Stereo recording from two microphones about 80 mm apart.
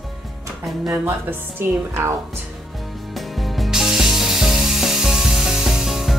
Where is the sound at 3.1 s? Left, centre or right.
Centre.